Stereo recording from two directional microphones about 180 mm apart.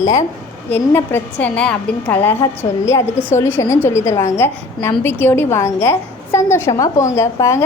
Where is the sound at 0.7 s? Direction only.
10° left (ahead or behind).